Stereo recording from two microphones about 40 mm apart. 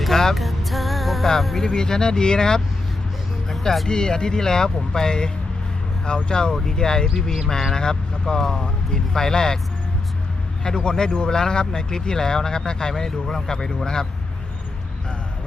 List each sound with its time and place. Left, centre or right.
0.0 s music: centre
1.6 s speech: centre
3.5 s music: centre
3.8 s speech: centre
10.6 s speech: centre